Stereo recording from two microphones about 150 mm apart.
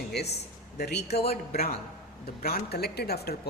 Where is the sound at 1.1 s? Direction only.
45° left (ahead or behind).